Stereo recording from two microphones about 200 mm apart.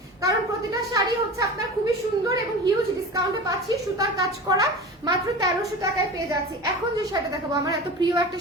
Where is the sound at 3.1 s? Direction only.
15° right (ahead or behind).